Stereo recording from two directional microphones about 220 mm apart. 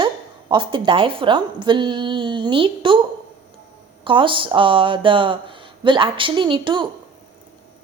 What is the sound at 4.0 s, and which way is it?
Speech, 20° right (ahead or behind).